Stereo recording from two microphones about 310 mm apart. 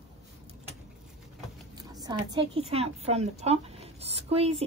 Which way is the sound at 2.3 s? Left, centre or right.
Centre.